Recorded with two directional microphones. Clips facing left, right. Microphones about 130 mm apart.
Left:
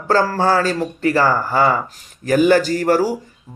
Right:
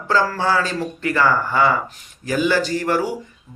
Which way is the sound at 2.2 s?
50° left (ahead or behind).